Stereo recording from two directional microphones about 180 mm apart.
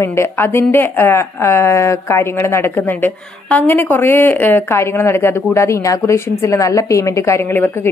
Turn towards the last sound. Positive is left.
turn(degrees=10)  # may be behind; listen again after turning